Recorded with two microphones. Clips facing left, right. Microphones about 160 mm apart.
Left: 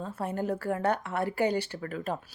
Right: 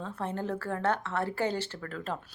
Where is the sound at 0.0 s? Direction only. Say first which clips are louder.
Left 2 dB; 10° left (ahead or behind).